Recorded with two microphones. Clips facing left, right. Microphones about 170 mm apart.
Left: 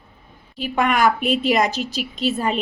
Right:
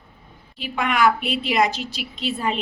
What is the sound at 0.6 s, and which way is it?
A woman's voice, 45° left (ahead or behind).